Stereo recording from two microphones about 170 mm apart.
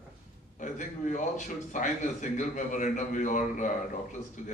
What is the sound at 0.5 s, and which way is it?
A man's voice, 45° left (ahead or behind).